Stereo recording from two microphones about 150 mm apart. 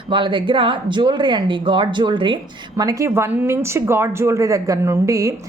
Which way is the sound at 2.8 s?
20° right (ahead or behind).